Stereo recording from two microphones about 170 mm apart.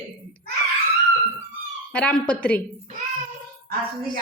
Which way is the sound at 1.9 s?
5° left (ahead or behind).